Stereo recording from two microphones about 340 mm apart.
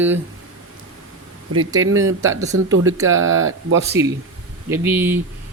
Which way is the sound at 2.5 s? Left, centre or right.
Right.